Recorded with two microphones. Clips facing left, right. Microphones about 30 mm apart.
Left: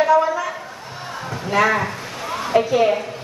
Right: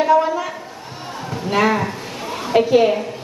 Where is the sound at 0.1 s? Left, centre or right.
Centre.